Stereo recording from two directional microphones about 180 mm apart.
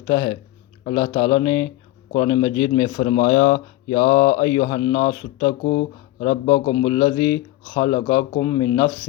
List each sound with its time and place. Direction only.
0.1 s speech: 25° left (ahead or behind)
5.6 s speech: 40° left (ahead or behind)
6.8 s speech: 25° left (ahead or behind)